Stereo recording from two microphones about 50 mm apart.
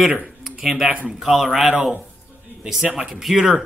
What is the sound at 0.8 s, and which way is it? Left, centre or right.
Speech, right.